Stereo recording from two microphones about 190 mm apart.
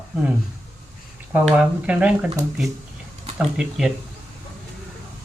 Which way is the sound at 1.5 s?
5° right (ahead or behind).